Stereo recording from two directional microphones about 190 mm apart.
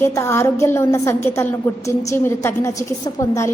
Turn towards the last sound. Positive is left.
turn(degrees=15)  # may be behind; listen again after turning